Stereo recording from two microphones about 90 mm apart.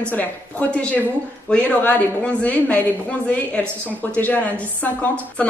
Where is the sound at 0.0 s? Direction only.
15° left (ahead or behind).